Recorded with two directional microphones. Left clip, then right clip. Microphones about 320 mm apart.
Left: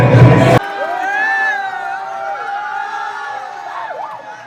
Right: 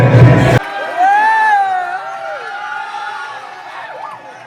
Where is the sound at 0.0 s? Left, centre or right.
Centre.